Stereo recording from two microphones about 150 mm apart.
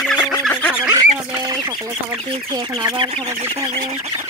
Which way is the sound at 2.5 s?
25° right (ahead or behind).